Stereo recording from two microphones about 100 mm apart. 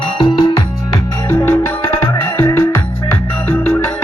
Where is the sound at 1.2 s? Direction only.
25° left (ahead or behind).